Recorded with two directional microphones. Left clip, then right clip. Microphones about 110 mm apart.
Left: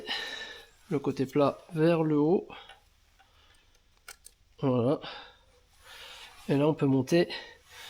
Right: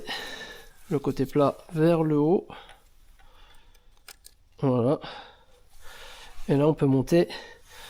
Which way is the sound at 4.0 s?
20° right (ahead or behind).